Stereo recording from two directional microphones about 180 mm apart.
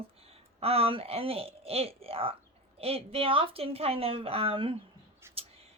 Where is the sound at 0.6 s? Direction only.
35° right (ahead or behind).